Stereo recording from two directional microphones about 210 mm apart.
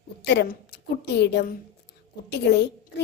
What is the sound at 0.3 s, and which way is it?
A woman's voice, 55° left (ahead or behind).